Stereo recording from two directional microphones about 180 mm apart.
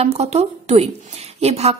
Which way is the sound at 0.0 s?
35° right (ahead or behind).